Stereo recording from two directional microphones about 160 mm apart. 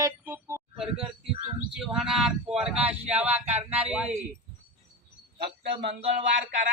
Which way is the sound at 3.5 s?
45° right (ahead or behind).